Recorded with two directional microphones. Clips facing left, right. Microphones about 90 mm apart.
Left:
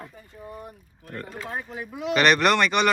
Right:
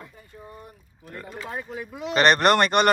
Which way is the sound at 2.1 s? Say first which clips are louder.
Right 1 dB; 35° right (ahead or behind).